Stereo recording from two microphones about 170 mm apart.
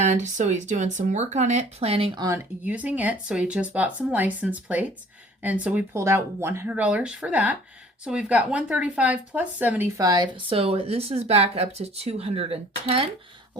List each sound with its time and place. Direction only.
0.0 s speech: 45° right (ahead or behind)
2.2 s speech: 15° right (ahead or behind); by 13.1 s 35° right (ahead or behind)